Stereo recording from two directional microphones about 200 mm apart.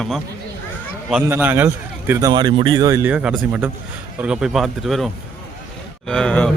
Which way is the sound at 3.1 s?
5° right (ahead or behind).